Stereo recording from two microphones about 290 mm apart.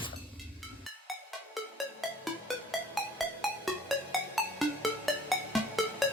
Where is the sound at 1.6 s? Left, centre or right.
Centre.